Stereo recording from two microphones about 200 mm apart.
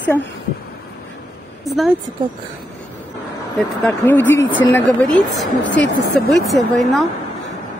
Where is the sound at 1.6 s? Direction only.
Centre (ahead or behind).